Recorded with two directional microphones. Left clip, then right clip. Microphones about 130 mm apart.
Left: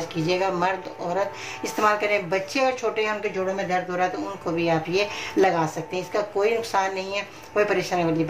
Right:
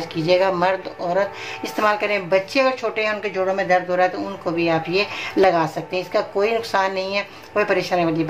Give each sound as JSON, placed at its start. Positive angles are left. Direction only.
{"t": 0.1, "sound": "speech", "side_deg": -20}
{"t": 3.3, "sound": "speech", "side_deg": -35}
{"t": 4.6, "sound": "speech", "side_deg": -10}